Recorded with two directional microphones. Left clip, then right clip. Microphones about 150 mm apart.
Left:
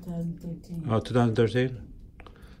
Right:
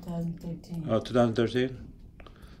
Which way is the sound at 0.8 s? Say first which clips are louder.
Right 1 dB; 25° left (ahead or behind).